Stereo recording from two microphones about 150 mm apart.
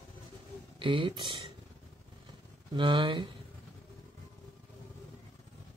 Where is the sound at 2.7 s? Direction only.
30° right (ahead or behind).